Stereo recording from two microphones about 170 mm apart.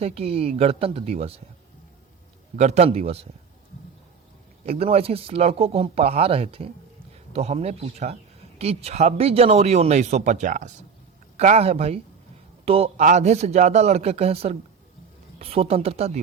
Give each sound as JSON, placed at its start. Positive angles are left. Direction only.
{"t": 0.0, "sound": "speech", "side_deg": -35}
{"t": 2.6, "sound": "speech", "side_deg": -40}
{"t": 4.6, "sound": "speech", "side_deg": -35}